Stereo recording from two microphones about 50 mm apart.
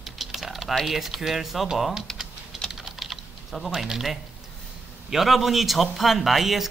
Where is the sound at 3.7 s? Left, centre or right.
Centre.